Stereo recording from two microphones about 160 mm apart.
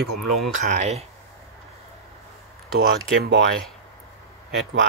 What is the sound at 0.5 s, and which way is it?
Speech, 50° right (ahead or behind).